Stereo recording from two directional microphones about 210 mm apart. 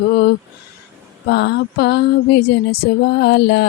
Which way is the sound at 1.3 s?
55° left (ahead or behind).